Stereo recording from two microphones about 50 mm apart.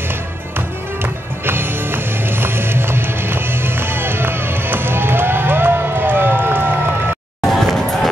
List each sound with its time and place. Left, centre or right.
0.6 s music: right
7.4 s music: centre